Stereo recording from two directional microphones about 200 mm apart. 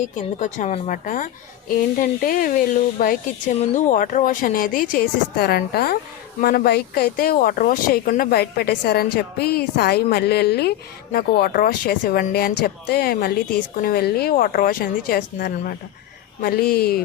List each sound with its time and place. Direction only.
0.2 s a woman's voice: 40° left (ahead or behind)
3.6 s speech: 35° left (ahead or behind)